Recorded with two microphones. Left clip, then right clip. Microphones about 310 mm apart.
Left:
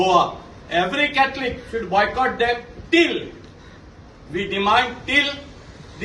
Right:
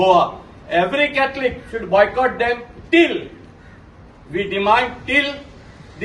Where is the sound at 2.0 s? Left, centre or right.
Centre.